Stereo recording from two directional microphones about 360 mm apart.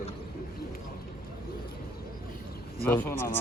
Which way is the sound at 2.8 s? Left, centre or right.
Centre.